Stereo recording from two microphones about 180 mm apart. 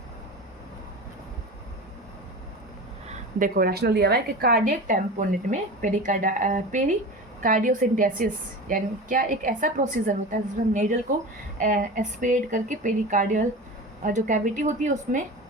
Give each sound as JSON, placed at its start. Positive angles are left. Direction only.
{"t": 3.1, "sound": "a woman's voice", "side_deg": -50}